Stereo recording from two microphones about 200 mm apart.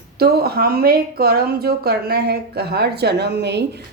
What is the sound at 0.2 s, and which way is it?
Speech, 50° right (ahead or behind).